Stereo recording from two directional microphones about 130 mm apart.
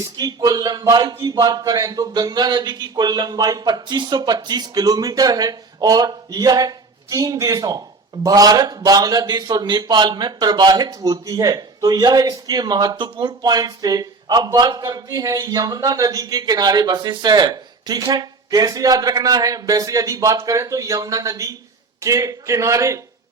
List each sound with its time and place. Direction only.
0.2 s a man's voice: 30° right (ahead or behind)